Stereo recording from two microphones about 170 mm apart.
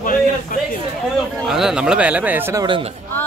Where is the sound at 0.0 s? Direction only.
55° left (ahead or behind).